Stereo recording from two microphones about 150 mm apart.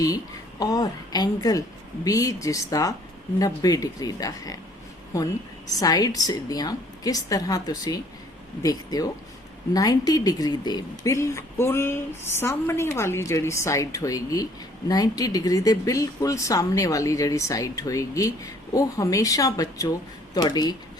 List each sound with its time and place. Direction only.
0.6 s speech: 25° left (ahead or behind)